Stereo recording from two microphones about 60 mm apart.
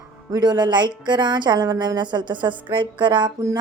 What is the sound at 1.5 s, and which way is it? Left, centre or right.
Speech, right.